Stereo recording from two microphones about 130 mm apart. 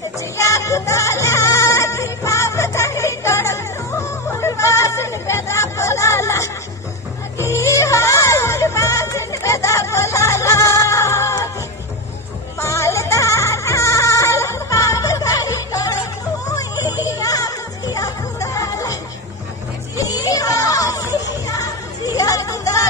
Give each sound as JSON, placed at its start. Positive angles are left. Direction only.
{"t": 0.4, "sound": "music", "side_deg": 25}
{"t": 12.5, "sound": "music", "side_deg": 25}
{"t": 20.0, "sound": "children playing", "side_deg": 25}
{"t": 22.0, "sound": "a sound", "side_deg": 25}